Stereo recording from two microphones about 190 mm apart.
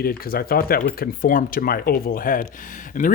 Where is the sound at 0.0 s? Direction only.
50° left (ahead or behind).